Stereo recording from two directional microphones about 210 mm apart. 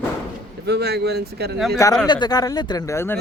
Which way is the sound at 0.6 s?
50° right (ahead or behind).